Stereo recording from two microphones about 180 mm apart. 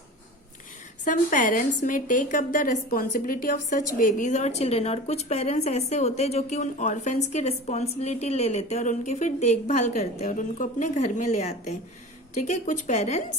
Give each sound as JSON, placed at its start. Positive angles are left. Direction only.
{"t": 1.0, "sound": "a woman's voice", "side_deg": 45}